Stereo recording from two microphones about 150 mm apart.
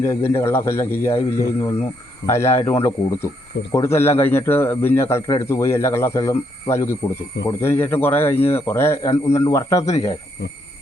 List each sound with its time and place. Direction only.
0.0 s a man's voice: 20° left (ahead or behind)